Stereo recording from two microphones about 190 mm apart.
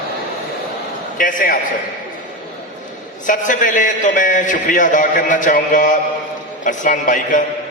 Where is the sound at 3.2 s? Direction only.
45° left (ahead or behind).